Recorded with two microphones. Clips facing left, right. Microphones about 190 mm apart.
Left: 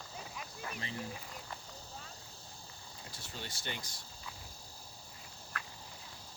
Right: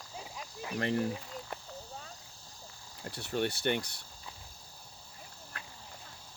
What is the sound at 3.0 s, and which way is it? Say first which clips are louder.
Speech: right 15 dB; 65° right (ahead or behind).